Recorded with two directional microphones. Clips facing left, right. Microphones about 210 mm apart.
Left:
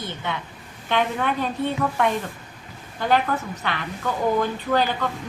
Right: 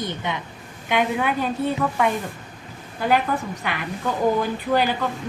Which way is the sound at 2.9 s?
10° right (ahead or behind).